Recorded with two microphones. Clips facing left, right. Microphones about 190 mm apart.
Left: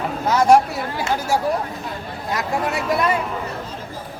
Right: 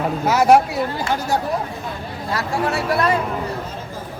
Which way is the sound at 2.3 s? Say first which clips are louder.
Right 1 dB; 20° left (ahead or behind).